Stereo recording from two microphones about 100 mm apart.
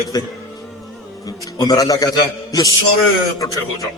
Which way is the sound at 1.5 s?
40° left (ahead or behind).